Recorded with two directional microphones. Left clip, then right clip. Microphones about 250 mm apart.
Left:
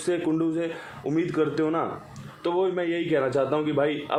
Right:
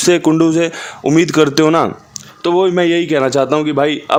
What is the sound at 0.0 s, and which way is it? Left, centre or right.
A man's voice, right.